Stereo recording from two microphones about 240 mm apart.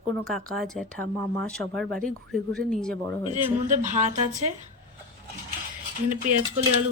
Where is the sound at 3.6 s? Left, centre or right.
Right.